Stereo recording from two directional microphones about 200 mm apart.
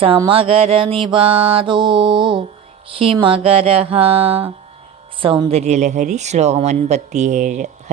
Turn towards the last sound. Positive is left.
turn(degrees=-40)  # may be behind; listen again after turning